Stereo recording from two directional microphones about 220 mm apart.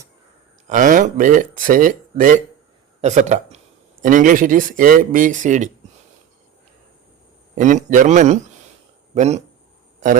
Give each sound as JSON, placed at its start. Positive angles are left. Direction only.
{"t": 0.7, "sound": "speech", "side_deg": -35}
{"t": 7.5, "sound": "speech", "side_deg": -35}